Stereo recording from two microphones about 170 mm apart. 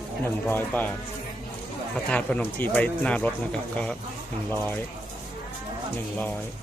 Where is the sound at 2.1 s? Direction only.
5° left (ahead or behind).